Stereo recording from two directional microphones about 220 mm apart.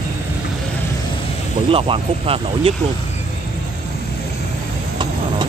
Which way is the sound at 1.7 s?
25° right (ahead or behind).